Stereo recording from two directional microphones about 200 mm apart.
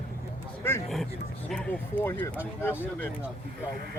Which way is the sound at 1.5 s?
5° left (ahead or behind).